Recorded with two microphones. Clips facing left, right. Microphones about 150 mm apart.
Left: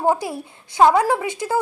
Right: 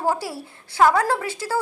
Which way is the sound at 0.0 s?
20° left (ahead or behind).